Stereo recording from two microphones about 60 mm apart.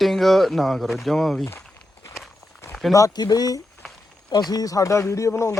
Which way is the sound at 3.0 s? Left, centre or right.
Left.